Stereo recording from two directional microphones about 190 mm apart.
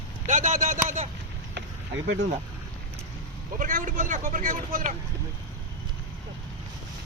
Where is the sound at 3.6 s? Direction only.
40° right (ahead or behind).